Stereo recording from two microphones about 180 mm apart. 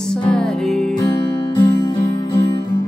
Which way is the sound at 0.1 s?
5° left (ahead or behind).